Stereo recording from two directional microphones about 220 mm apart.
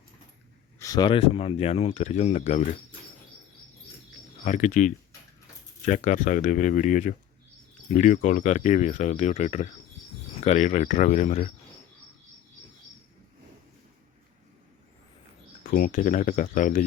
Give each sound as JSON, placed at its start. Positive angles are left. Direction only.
{"t": 0.8, "sound": "speech", "side_deg": 15}
{"t": 4.4, "sound": "speech", "side_deg": 35}
{"t": 15.6, "sound": "speech", "side_deg": 35}